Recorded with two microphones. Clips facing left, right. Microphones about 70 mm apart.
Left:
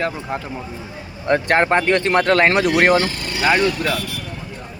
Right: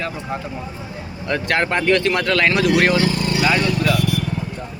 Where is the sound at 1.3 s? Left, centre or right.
Left.